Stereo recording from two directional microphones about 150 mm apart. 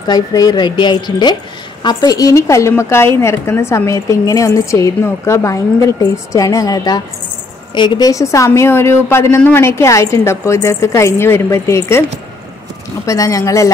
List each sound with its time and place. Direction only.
0.0 s a woman's voice: 25° left (ahead or behind)
13.0 s a woman's voice: 20° left (ahead or behind)